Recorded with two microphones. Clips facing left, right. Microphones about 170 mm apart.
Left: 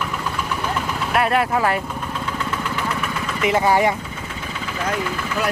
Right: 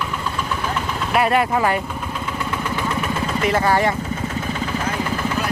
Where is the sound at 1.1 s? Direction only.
Centre (ahead or behind).